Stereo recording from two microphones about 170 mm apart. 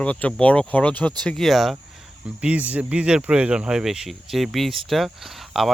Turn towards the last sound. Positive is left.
turn(degrees=0)  # may be behind; listen again after turning